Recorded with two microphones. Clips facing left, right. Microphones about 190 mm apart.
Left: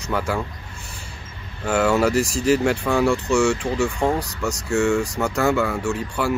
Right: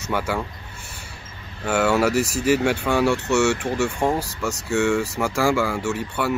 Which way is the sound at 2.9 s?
5° right (ahead or behind).